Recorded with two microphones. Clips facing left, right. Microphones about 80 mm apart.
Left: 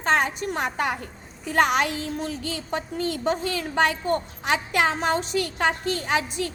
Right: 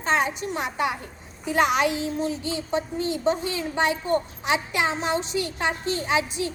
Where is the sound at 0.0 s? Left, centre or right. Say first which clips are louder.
Left 1 dB; left.